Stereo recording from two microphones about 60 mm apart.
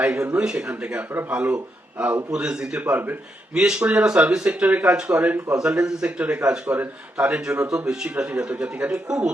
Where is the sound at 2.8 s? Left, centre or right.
Right.